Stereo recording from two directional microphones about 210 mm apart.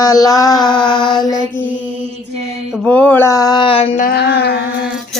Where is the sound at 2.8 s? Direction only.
5° left (ahead or behind); by 3.8 s 25° left (ahead or behind).